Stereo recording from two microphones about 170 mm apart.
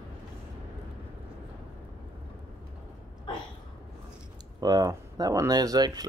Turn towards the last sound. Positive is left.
turn(degrees=-25)  # may be behind; listen again after turning